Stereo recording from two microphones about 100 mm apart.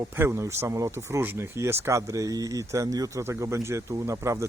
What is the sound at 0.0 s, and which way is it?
Speech, 25° right (ahead or behind).